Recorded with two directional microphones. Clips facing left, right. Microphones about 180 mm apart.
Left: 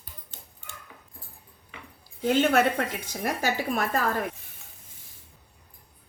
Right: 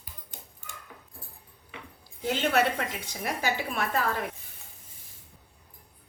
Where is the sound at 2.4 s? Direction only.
50° left (ahead or behind).